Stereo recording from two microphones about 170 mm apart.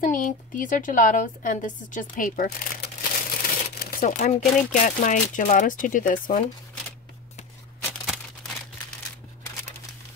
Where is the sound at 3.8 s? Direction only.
50° left (ahead or behind).